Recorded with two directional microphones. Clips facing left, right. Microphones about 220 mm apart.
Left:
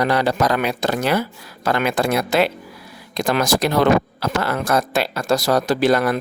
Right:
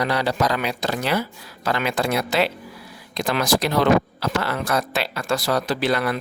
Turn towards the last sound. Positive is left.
turn(degrees=45)  # may be behind; listen again after turning